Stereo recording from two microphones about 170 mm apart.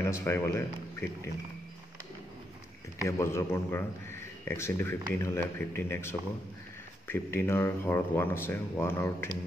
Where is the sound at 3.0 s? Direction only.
15° left (ahead or behind).